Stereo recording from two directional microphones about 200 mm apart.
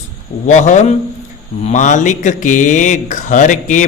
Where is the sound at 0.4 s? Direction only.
35° left (ahead or behind).